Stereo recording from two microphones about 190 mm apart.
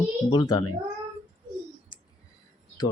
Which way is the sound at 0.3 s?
25° left (ahead or behind).